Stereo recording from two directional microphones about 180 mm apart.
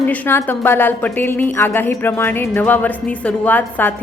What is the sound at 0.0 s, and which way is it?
A woman's voice, 10° left (ahead or behind).